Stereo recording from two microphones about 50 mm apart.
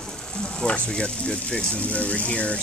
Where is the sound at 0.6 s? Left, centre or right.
Centre.